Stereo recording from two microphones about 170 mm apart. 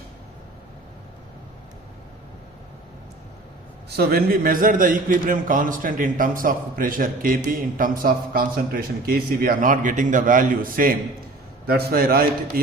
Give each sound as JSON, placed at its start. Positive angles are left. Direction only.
{"t": 3.8, "sound": "a man's voice", "side_deg": -65}
{"t": 11.6, "sound": "a man's voice", "side_deg": -65}